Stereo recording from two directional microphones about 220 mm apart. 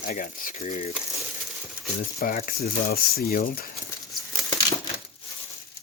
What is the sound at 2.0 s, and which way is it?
Speech, 40° left (ahead or behind).